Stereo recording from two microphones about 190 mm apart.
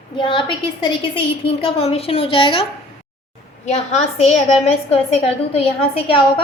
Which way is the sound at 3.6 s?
35° left (ahead or behind).